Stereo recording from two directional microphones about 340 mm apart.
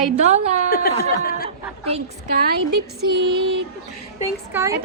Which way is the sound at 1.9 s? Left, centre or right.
Right.